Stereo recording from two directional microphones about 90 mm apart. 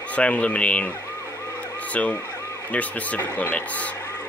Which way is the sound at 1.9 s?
15° left (ahead or behind).